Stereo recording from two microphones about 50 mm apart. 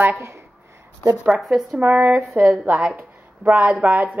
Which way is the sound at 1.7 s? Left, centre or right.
Right.